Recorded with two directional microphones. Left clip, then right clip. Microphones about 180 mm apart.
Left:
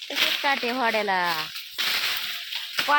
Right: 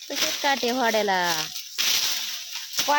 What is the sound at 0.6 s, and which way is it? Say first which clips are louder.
Speech: right 1 dB; 35° right (ahead or behind).